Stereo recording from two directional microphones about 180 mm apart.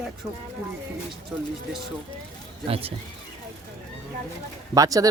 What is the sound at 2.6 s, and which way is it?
Speech, 35° right (ahead or behind).